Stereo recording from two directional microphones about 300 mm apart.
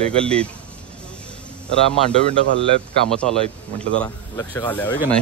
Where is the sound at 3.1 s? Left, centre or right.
Centre.